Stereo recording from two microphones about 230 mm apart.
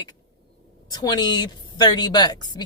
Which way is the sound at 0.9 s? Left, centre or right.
Centre.